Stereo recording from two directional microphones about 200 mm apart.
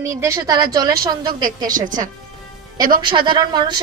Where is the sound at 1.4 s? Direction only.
40° right (ahead or behind).